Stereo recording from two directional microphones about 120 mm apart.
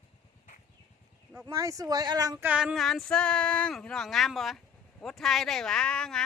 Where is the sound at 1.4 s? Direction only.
25° right (ahead or behind).